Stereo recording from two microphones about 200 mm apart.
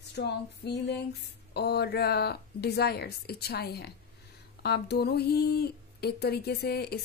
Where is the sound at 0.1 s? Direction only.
55° left (ahead or behind).